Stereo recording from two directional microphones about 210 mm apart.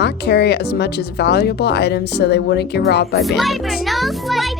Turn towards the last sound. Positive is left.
turn(degrees=0)  # may be behind; listen again after turning